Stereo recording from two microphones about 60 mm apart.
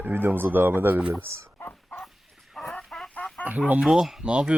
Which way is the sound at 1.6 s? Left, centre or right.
Left.